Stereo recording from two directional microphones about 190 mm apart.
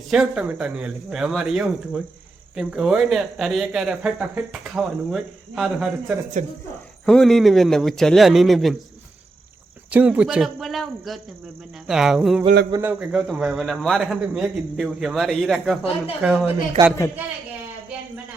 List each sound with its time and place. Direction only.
0.1 s speech: 5° right (ahead or behind)
6.4 s speech: 40° right (ahead or behind)
7.0 s speech: 5° left (ahead or behind)
9.9 s speech: 5° right (ahead or behind)
16.8 s a man's voice: 20° right (ahead or behind)